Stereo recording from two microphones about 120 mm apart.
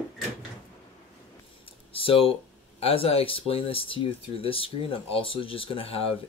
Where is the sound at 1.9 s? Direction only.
50° left (ahead or behind).